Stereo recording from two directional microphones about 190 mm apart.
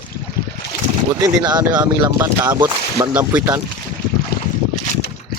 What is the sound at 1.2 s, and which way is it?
Speech, 20° right (ahead or behind).